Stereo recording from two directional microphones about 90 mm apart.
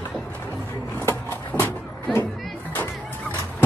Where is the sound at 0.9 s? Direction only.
25° left (ahead or behind).